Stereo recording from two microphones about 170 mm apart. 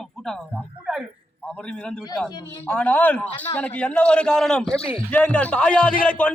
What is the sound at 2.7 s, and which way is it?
A man's voice, 10° left (ahead or behind).